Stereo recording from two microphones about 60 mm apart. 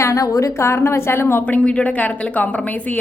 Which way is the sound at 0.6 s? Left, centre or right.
Left.